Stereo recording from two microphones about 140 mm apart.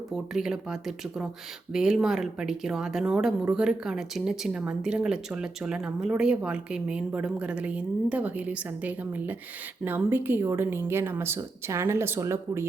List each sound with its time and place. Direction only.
0.3 s speech: 5° right (ahead or behind)